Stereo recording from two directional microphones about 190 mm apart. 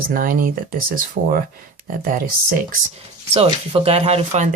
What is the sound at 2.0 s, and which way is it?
Speech, 50° right (ahead or behind).